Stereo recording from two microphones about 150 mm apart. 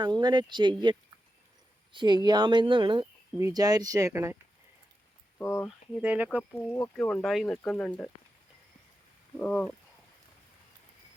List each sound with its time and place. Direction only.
0.0 s speech: 30° right (ahead or behind)
3.3 s speech: 20° right (ahead or behind)
5.4 s speech: 20° left (ahead or behind)
5.6 s speech: 5° right (ahead or behind)
6.7 s a sound: 20° left (ahead or behind)
6.9 s speech: 5° left (ahead or behind)
9.4 s a sound: 5° left (ahead or behind)